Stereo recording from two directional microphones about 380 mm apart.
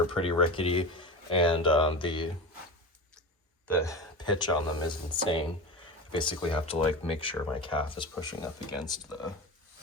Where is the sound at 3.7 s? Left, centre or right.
Centre.